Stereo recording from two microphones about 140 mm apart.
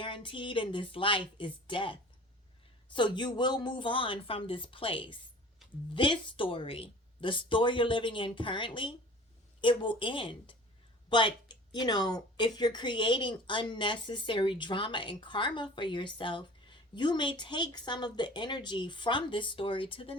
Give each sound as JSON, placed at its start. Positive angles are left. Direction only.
{"t": 0.0, "sound": "speech", "side_deg": 35}